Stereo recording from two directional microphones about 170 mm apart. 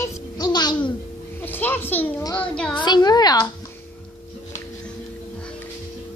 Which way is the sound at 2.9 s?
25° left (ahead or behind).